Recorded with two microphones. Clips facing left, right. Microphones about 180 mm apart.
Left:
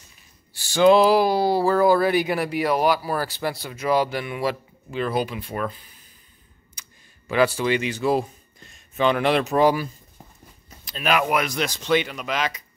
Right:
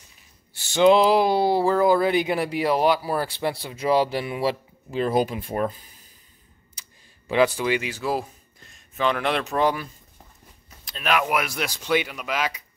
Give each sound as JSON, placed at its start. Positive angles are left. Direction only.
{"t": 0.5, "sound": "speech", "side_deg": -25}
{"t": 6.7, "sound": "a sound", "side_deg": -30}
{"t": 7.3, "sound": "speech", "side_deg": -15}
{"t": 10.9, "sound": "speech", "side_deg": 0}